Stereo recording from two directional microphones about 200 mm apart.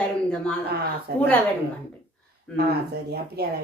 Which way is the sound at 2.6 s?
55° right (ahead or behind).